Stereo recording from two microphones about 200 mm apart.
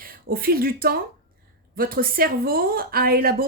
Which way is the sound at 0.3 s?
50° right (ahead or behind).